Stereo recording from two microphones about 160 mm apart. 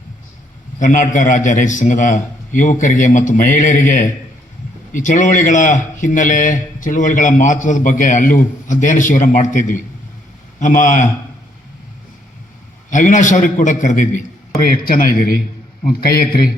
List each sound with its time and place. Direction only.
0.8 s a man's voice: 55° left (ahead or behind)
12.9 s a man's voice: 50° left (ahead or behind)
14.7 s a man's voice: 65° left (ahead or behind)